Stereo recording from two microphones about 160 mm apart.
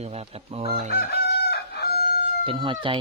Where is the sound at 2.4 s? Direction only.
30° right (ahead or behind).